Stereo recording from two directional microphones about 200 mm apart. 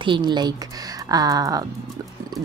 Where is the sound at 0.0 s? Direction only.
25° right (ahead or behind).